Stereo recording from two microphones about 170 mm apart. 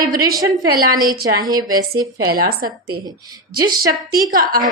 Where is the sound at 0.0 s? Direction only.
60° right (ahead or behind).